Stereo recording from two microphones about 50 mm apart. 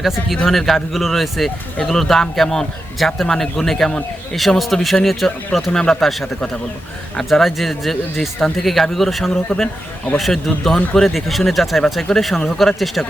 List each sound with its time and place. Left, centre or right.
0.0 s a man's voice: centre
7.3 s speech: centre
9.5 s a man's voice: left
10.2 s speech: centre